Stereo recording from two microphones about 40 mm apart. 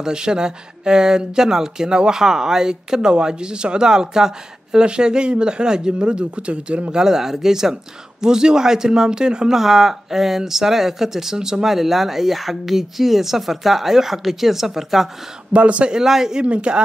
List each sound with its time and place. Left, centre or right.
0.0 s speech: centre
6.9 s speech: centre
9.6 s speech: centre
15.5 s speech: right
16.0 s speech: centre
16.4 s speech: right